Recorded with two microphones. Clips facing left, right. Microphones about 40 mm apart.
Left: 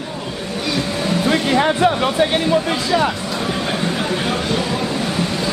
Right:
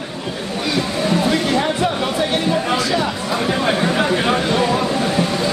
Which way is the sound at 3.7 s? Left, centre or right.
Right.